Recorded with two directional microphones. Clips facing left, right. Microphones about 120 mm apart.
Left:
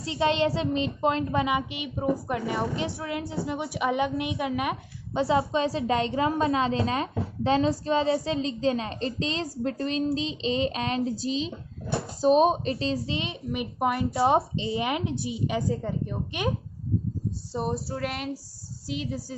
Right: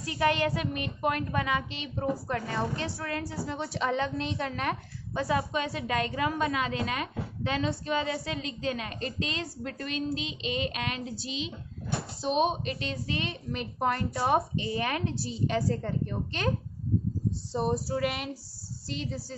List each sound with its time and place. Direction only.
0.0 s speech: 25° left (ahead or behind)
5.2 s a woman's voice: 25° left (ahead or behind)
17.5 s female singing: centre (ahead or behind)
18.9 s speech: 10° left (ahead or behind)